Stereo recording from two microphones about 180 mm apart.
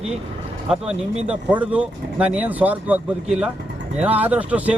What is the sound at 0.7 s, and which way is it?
Speech, 5° right (ahead or behind).